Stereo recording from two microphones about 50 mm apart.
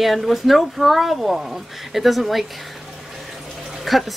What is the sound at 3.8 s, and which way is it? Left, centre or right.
Speech, centre.